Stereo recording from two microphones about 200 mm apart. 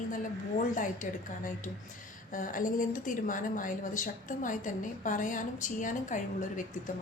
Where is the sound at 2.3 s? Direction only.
40° left (ahead or behind).